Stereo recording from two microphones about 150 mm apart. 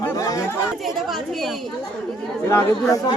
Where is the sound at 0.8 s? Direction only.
Centre (ahead or behind).